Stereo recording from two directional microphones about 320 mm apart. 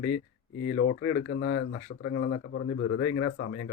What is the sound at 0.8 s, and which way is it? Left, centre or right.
A man's voice, left.